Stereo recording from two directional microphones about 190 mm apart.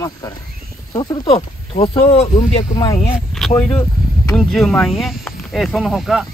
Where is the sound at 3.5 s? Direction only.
10° left (ahead or behind).